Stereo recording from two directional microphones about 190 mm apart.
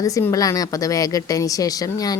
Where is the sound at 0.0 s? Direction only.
15° left (ahead or behind).